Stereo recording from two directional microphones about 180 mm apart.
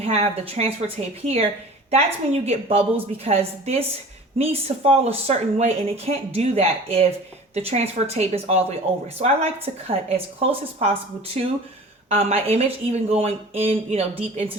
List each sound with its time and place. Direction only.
0.0 s speech: 35° right (ahead or behind)